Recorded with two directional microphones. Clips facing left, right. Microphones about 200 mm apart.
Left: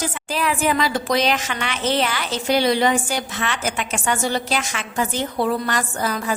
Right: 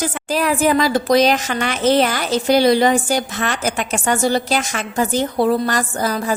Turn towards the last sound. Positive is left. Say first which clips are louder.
# right 4 dB
turn(degrees=-40)  # may be behind; listen again after turning